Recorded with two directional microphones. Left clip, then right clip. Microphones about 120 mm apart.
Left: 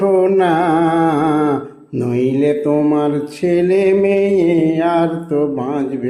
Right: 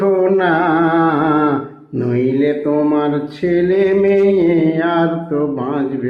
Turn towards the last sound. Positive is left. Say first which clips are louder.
# left 1 dB
turn(degrees=15)  # may be behind; listen again after turning